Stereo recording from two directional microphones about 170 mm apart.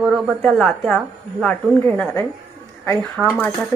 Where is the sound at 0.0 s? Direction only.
Centre (ahead or behind).